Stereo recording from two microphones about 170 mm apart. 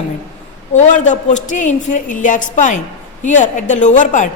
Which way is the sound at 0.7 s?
45° left (ahead or behind).